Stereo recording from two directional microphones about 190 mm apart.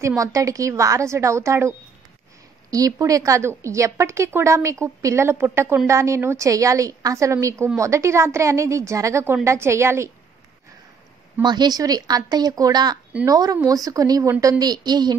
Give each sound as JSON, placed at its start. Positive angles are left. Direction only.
{"t": 0.0, "sound": "a woman's voice", "side_deg": -15}
{"t": 11.4, "sound": "speech", "side_deg": -20}